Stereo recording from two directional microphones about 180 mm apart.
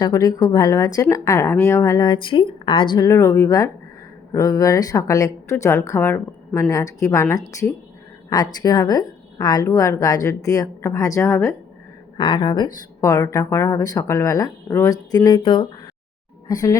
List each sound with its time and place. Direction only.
0.0 s a woman's voice: 20° left (ahead or behind)
12.1 s a woman's voice: 25° left (ahead or behind)